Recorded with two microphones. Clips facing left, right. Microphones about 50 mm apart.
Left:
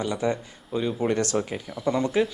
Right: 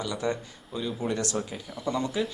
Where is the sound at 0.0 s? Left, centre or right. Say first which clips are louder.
Left 4 dB; left.